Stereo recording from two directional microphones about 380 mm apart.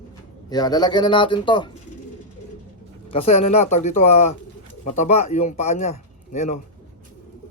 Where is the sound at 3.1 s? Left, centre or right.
Centre.